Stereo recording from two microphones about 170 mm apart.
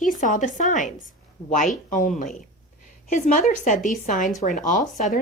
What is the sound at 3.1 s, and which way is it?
Speech, 50° left (ahead or behind).